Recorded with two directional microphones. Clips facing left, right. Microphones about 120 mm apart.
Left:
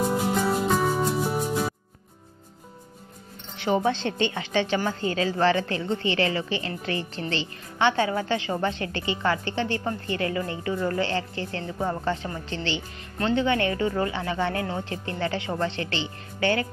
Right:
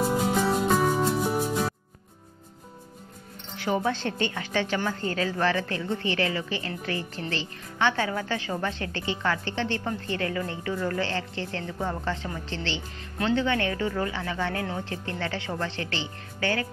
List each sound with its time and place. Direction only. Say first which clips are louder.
0.0 s music: even; centre (ahead or behind)
3.5 s a woman's voice: left 3 dB; 20° left (ahead or behind)